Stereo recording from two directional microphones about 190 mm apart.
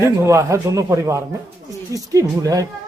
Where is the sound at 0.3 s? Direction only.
15° right (ahead or behind).